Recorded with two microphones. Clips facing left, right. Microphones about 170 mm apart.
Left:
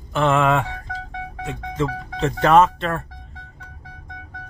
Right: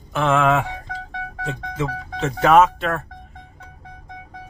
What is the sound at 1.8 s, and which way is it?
Speech, 5° right (ahead or behind).